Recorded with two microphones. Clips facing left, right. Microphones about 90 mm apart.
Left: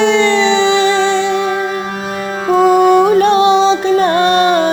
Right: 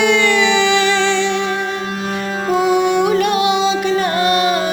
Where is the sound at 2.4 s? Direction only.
5° right (ahead or behind).